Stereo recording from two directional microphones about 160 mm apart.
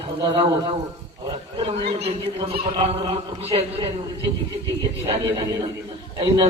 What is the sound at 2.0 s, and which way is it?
A man's voice, 35° right (ahead or behind).